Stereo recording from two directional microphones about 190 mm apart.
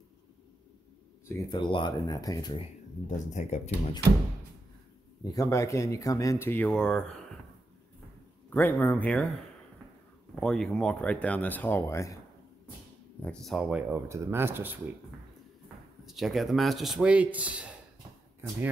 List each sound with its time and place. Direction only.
1.2 s speech: 20° left (ahead or behind)
3.1 s speech: 40° left (ahead or behind)
5.2 s speech: 20° left (ahead or behind)
8.5 s speech: 10° left (ahead or behind)
10.3 s speech: 5° left (ahead or behind)
13.2 s speech: 5° left (ahead or behind)
16.1 s a man's voice: centre (ahead or behind)